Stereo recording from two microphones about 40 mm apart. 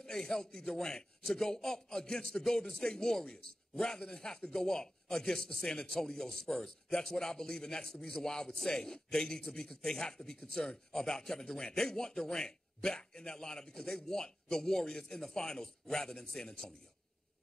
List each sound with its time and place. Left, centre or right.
0.0 s a man's voice: centre